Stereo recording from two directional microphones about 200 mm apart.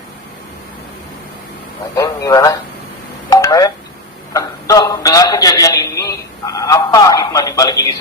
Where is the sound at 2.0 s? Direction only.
15° left (ahead or behind).